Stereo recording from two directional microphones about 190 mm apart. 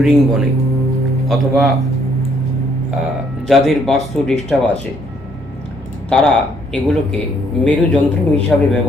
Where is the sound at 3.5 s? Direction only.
Centre (ahead or behind).